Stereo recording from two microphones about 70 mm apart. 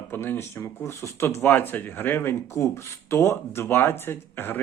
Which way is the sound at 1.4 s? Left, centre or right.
Left.